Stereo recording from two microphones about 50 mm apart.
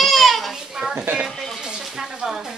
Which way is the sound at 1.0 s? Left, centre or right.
Right.